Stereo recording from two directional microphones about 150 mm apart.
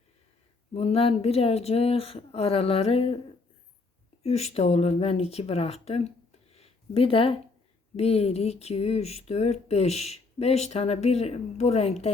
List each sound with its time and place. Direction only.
0.7 s a woman's voice: 45° left (ahead or behind)
4.2 s speech: 45° left (ahead or behind)